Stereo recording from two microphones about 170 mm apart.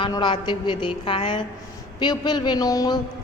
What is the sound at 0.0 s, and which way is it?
A woman's voice, 25° left (ahead or behind).